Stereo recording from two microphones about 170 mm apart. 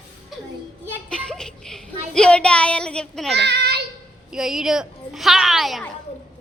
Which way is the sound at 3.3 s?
80° right.